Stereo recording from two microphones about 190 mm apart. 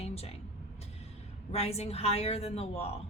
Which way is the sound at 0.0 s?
30° left (ahead or behind).